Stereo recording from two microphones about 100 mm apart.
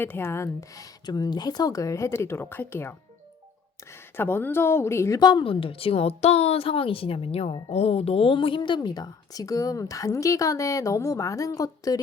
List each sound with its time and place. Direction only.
0.0 s a woman's voice: 25° left (ahead or behind)
1.0 s speech: 40° left (ahead or behind); by 2.9 s 20° left (ahead or behind)
4.2 s a woman's voice: 20° left (ahead or behind)
5.2 s a woman's voice: 50° left (ahead or behind)